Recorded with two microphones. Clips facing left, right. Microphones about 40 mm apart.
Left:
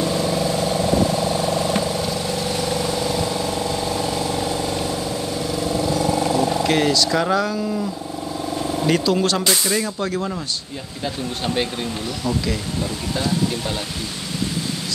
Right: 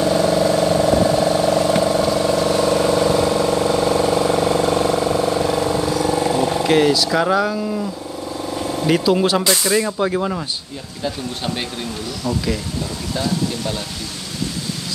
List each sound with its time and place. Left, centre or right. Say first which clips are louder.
0.0 s vehicle: right 5 dB; right
5.9 s vehicle: even; right
6.6 s speech: right 3 dB; centre